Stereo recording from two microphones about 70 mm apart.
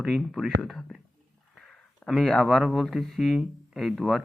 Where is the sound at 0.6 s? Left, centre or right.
Centre.